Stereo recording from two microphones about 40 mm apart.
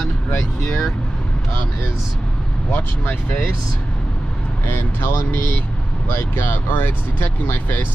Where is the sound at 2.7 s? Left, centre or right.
Left.